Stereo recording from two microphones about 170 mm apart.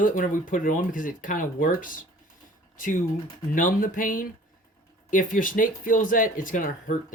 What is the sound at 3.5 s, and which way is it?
Speech, 55° left (ahead or behind).